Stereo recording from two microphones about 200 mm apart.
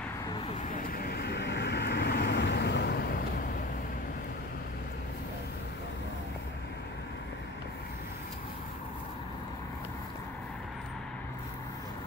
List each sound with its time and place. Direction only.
0.6 s vehicle: 45° left (ahead or behind)